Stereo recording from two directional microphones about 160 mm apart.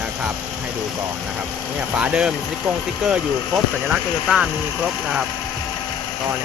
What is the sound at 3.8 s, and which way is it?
Speech, 5° right (ahead or behind).